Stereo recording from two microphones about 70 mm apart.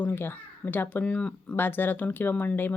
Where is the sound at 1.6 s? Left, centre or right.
Left.